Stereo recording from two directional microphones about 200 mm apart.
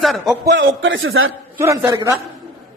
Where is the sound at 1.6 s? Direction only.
15° right (ahead or behind).